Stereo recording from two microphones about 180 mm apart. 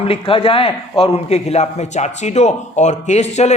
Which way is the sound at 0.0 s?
30° left (ahead or behind).